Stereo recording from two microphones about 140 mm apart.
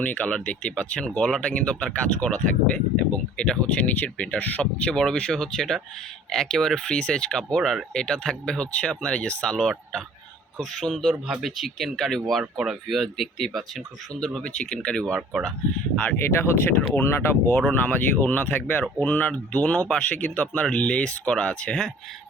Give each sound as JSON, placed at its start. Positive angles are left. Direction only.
{"t": 0.0, "sound": "speech", "side_deg": 10}
{"t": 16.0, "sound": "speech", "side_deg": 15}